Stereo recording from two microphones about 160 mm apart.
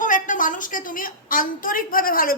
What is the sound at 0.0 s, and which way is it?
A woman's voice, 55° left (ahead or behind).